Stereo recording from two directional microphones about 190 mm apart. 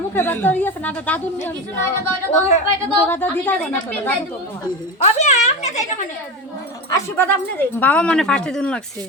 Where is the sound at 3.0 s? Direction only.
10° left (ahead or behind).